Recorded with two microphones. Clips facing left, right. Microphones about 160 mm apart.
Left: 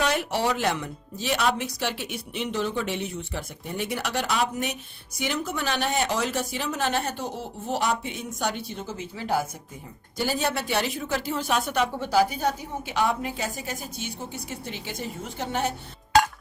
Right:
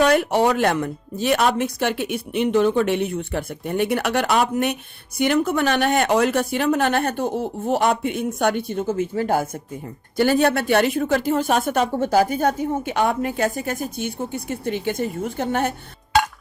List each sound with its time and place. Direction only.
0.0 s speech: 55° right (ahead or behind)